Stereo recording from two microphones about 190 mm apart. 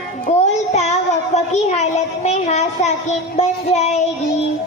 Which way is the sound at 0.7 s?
35° left (ahead or behind).